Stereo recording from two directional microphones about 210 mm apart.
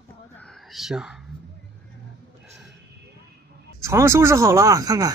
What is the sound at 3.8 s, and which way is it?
Speech, 15° right (ahead or behind).